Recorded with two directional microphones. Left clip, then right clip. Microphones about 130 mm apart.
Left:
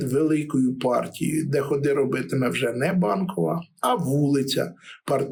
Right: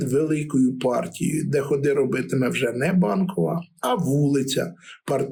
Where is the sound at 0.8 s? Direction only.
10° left (ahead or behind).